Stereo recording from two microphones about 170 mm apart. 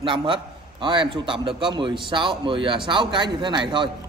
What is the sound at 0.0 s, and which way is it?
A man's voice, 30° right (ahead or behind).